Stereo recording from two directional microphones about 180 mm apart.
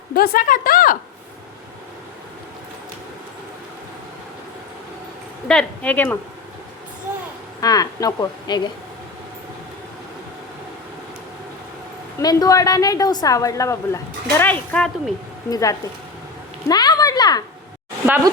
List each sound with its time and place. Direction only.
0.1 s a woman's voice: 50° left (ahead or behind)
5.5 s speech: 5° left (ahead or behind)
7.6 s speech: 20° left (ahead or behind)
12.2 s speech: 20° left (ahead or behind)
15.4 s speech: 20° left (ahead or behind)
16.6 s a sound: 20° left (ahead or behind)